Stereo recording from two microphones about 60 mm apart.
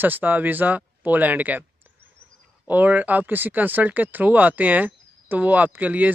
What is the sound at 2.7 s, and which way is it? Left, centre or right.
Speech, right.